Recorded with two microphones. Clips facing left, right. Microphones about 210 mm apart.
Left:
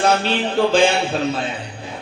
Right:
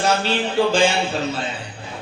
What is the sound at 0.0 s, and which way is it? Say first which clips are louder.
Speech: left 2 dB; 60° left (ahead or behind).